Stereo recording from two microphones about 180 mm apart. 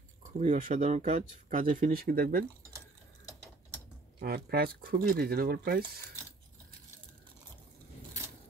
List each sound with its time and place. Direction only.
0.2 s speech: 40° right (ahead or behind)
4.2 s speech: 60° right (ahead or behind)